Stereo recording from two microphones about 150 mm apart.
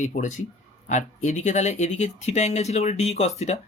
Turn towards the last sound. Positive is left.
turn(degrees=45)  # may be behind; listen again after turning